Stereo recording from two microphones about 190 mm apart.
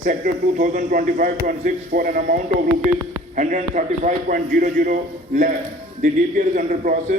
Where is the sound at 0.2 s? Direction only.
50° right (ahead or behind).